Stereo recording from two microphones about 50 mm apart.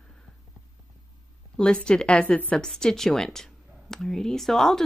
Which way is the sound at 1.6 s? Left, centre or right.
Centre.